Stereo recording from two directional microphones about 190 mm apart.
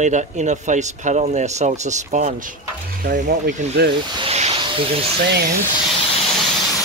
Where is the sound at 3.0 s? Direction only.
50° right (ahead or behind).